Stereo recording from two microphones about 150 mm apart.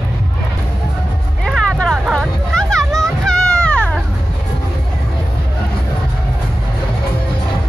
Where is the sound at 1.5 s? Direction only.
5° right (ahead or behind).